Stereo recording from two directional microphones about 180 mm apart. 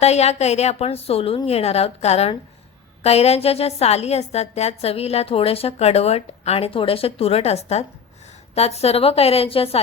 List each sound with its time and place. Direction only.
0.0 s a woman's voice: 35° left (ahead or behind)